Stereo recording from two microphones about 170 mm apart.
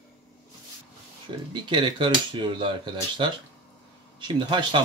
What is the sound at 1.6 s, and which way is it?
Speech, 30° right (ahead or behind).